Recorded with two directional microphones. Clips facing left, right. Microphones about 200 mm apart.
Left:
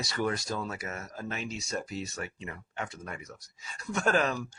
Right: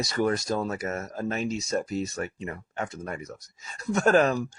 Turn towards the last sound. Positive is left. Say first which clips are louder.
# right 7 dB
turn(degrees=-45)  # may be behind; listen again after turning